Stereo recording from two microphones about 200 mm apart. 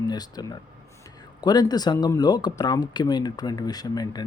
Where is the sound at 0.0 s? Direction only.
20° left (ahead or behind).